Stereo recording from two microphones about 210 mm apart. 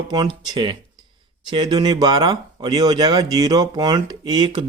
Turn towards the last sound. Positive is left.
turn(degrees=-20)  # may be behind; listen again after turning